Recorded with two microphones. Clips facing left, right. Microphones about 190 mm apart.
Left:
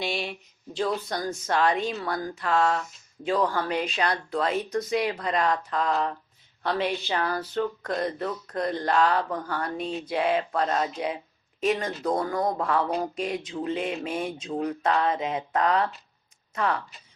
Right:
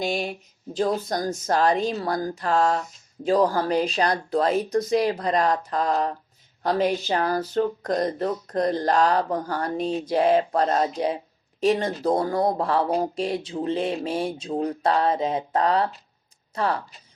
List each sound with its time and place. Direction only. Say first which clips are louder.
0.0 s speech: right 4 dB; 45° right (ahead or behind)